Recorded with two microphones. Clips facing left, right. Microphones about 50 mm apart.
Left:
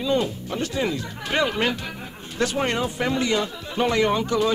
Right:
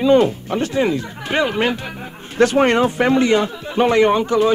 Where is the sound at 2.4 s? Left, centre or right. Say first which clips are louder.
Right 10 dB; right.